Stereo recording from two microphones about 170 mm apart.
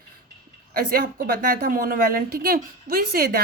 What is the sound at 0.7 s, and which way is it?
A woman's voice, 60° right (ahead or behind).